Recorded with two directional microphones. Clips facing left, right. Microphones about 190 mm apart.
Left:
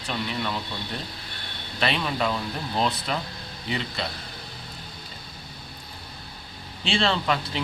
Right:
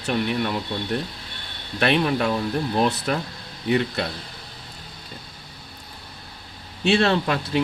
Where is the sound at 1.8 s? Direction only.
60° right (ahead or behind).